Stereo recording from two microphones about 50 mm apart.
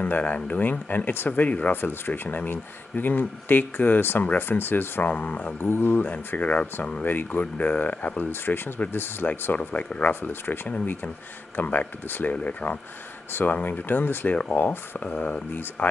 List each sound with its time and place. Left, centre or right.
0.0 s speech: left
1.3 s speech: left
1.8 s speech: left
5.1 s speech: left
5.6 s speech: left
6.0 s speech: left
10.4 s speech: left
11.5 s speech: left
15.0 s speech: left